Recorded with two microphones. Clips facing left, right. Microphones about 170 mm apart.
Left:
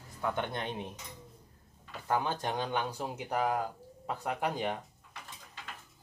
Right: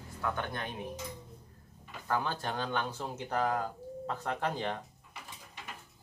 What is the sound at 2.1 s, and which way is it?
Speech, 20° left (ahead or behind).